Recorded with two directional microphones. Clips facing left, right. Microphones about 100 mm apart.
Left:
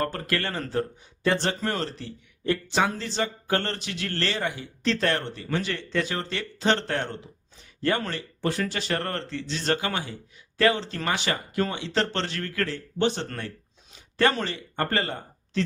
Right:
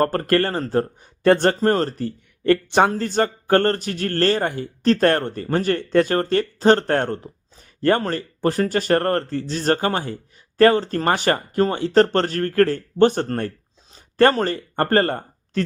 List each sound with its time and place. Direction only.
0.0 s speech: 50° right (ahead or behind)
2.9 s speech: 50° right (ahead or behind)